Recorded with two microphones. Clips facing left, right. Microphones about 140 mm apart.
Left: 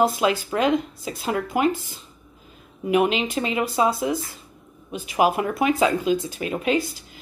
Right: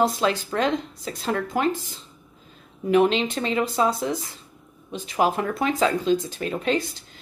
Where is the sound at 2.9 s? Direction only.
5° left (ahead or behind).